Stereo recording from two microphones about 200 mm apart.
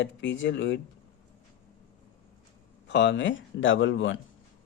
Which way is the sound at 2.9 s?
65° left (ahead or behind).